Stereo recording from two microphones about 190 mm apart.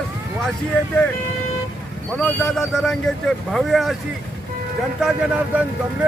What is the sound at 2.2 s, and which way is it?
Speech, 5° left (ahead or behind).